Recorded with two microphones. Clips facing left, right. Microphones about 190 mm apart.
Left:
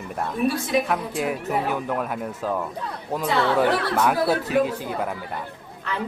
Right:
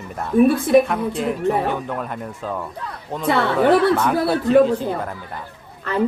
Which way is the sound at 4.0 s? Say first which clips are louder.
Right 1 dB; 5° left (ahead or behind).